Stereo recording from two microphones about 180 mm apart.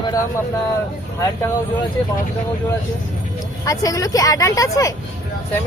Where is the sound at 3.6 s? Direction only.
20° left (ahead or behind).